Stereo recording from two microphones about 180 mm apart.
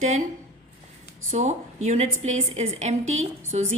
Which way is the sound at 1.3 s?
40° right (ahead or behind).